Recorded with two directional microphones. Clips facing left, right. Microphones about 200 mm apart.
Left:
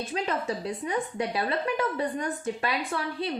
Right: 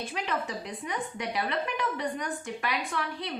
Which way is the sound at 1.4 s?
35° left (ahead or behind).